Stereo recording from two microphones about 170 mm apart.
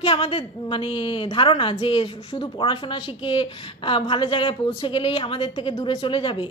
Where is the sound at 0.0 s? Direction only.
35° left (ahead or behind).